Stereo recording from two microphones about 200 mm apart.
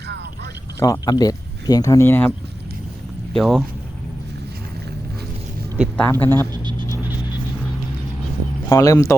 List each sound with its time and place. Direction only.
0.8 s speech: 20° left (ahead or behind)
3.3 s speech: centre (ahead or behind)
6.0 s speech: 10° left (ahead or behind)
6.5 s a sound: 25° right (ahead or behind)
8.7 s speech: 15° left (ahead or behind)